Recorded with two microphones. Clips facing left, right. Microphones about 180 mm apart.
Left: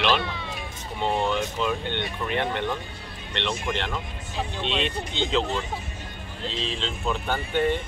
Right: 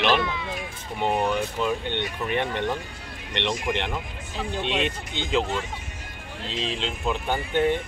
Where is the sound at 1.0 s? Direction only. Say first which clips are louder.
Right 1 dB; 15° right (ahead or behind).